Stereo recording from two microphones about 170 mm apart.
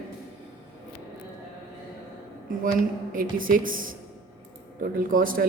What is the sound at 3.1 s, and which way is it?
A man's voice, 55° right (ahead or behind).